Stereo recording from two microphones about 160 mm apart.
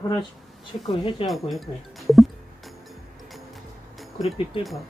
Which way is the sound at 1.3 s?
Centre (ahead or behind).